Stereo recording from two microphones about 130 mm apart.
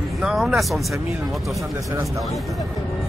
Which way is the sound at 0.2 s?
5° right (ahead or behind).